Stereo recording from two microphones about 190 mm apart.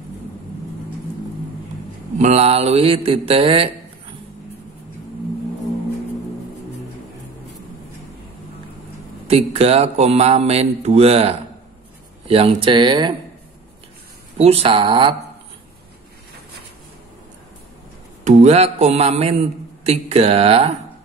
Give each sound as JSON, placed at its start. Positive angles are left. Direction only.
{"t": 2.1, "sound": "speech", "side_deg": -35}
{"t": 9.3, "sound": "speech", "side_deg": -35}
{"t": 14.4, "sound": "speech", "side_deg": -30}
{"t": 18.2, "sound": "speech", "side_deg": -35}